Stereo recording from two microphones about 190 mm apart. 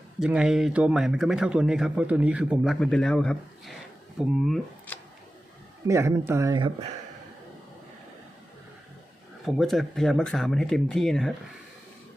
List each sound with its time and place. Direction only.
0.2 s speech: 5° right (ahead or behind)
5.9 s speech: 15° right (ahead or behind)
9.4 s speech: centre (ahead or behind)